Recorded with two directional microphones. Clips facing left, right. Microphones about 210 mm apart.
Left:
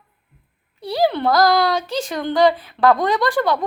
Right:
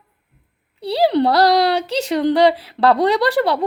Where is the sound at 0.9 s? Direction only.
30° right (ahead or behind).